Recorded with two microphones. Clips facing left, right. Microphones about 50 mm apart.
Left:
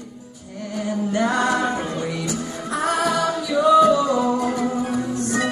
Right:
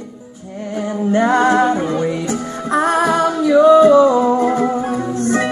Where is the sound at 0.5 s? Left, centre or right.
Right.